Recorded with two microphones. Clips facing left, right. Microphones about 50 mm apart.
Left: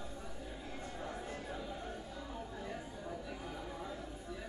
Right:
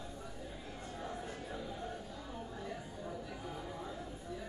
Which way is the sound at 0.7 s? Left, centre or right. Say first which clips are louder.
Even; left.